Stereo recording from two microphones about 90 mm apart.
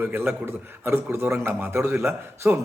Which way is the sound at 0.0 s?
25° right (ahead or behind).